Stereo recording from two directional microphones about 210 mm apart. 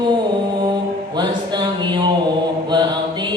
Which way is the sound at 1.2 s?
20° right (ahead or behind).